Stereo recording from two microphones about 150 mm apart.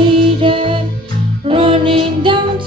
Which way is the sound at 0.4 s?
35° right (ahead or behind).